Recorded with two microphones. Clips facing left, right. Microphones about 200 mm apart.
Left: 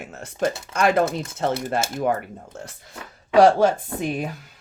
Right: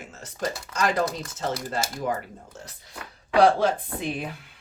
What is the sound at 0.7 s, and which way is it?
Speech, 60° left (ahead or behind).